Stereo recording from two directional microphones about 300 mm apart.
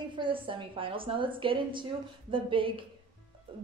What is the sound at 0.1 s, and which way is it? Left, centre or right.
A woman's voice, centre.